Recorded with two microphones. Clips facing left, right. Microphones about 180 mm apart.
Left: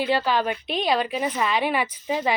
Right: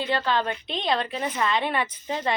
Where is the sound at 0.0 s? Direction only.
10° left (ahead or behind).